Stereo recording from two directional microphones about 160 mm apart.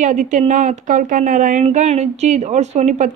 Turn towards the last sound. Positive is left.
turn(degrees=-45)  # may be behind; listen again after turning